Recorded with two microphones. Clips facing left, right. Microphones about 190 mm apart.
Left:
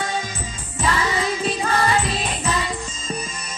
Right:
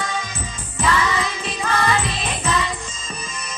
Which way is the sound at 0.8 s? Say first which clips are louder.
Right 1 dB; 35° left (ahead or behind).